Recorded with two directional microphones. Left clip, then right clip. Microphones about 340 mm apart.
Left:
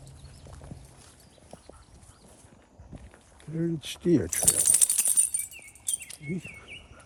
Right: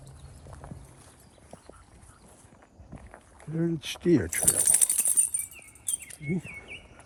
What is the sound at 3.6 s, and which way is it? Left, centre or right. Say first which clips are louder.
Speech: right 1 dB; centre.